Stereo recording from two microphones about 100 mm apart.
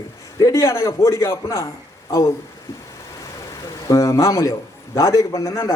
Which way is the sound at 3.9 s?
30° left (ahead or behind).